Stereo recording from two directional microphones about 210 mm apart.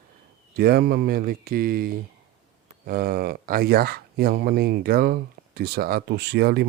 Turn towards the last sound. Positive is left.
turn(degrees=-50)  # may be behind; listen again after turning